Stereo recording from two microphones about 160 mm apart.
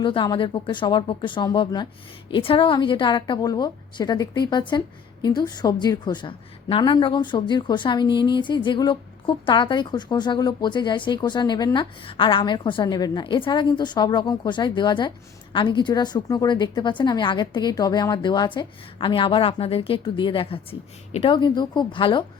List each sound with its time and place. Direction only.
0.0 s a woman's voice: 30° left (ahead or behind)